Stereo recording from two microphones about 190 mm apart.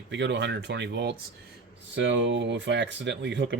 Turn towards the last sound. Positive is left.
turn(degrees=-65)  # may be behind; listen again after turning